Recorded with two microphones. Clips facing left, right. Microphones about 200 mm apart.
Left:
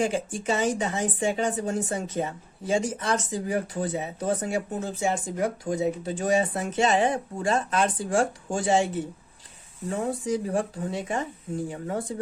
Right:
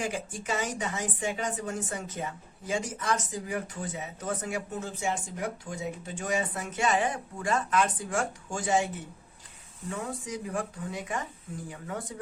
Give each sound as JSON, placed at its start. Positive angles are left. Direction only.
{"t": 0.0, "sound": "speech", "side_deg": 30}
{"t": 9.9, "sound": "speech", "side_deg": 30}